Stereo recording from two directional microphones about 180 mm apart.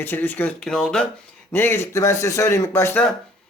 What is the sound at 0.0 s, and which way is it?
Speech, 10° left (ahead or behind).